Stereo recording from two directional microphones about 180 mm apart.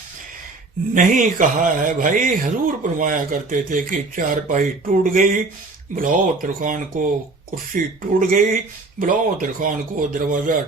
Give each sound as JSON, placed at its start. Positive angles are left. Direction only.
{"t": 0.9, "sound": "speech", "side_deg": -45}
{"t": 8.2, "sound": "speech", "side_deg": -50}